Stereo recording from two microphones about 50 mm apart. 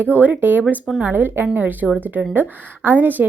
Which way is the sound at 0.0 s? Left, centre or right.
Right.